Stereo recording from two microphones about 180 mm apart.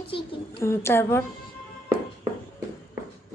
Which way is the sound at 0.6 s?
15° left (ahead or behind).